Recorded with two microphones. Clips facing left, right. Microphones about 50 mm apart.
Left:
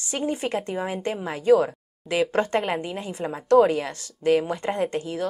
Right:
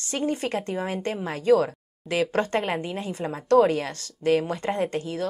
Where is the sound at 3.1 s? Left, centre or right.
Left.